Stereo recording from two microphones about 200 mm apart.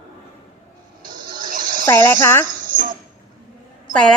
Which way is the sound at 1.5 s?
45° right (ahead or behind).